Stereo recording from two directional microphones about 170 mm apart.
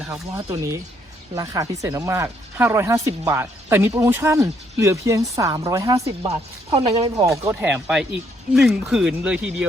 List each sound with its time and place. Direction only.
0.1 s speech: 15° right (ahead or behind)
6.7 s speech: 35° right (ahead or behind)
7.4 s speech: 10° right (ahead or behind)